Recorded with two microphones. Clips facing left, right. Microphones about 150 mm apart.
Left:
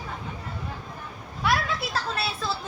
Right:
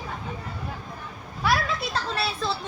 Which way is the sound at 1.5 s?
Centre (ahead or behind).